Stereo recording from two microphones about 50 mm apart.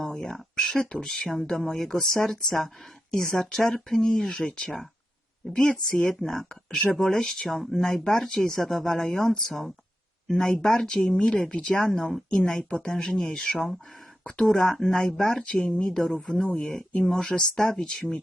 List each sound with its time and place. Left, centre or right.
0.0 s speech: centre